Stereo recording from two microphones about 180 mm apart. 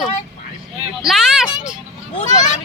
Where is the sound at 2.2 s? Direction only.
45° left (ahead or behind).